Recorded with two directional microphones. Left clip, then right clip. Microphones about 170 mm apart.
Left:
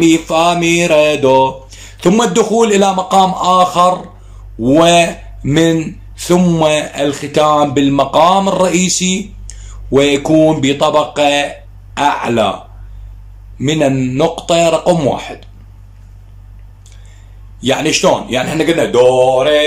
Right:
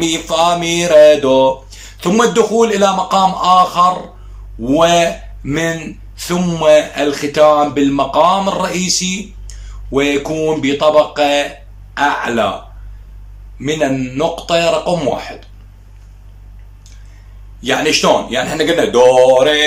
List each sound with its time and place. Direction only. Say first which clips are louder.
0.0 s mantra: left 3 dB; 10° left (ahead or behind)
4.6 s speech: left 2 dB; 20° left (ahead or behind)
11.9 s mantra: left 1 dB; 20° left (ahead or behind)
13.6 s speech: left 3 dB; 20° left (ahead or behind)
17.6 s mantra: even; 20° left (ahead or behind); by 19.6 s 5° left (ahead or behind)